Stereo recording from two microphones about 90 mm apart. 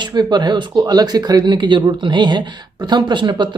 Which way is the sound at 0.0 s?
55° right (ahead or behind).